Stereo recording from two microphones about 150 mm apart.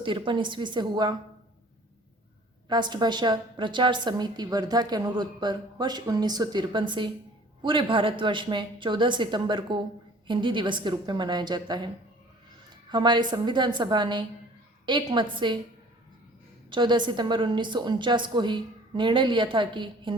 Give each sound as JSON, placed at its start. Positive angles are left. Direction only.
{"t": 0.0, "sound": "a woman's voice", "side_deg": -35}
{"t": 2.6, "sound": "a woman's voice", "side_deg": -30}
{"t": 12.9, "sound": "a woman's voice", "side_deg": -30}
{"t": 16.6, "sound": "a woman's voice", "side_deg": -30}